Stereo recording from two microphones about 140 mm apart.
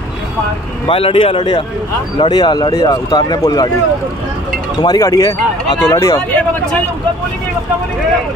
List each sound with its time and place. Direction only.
0.8 s a man's voice: 40° left (ahead or behind)
4.8 s speech: 25° left (ahead or behind)